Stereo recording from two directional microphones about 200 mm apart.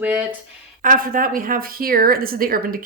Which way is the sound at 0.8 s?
45° right (ahead or behind).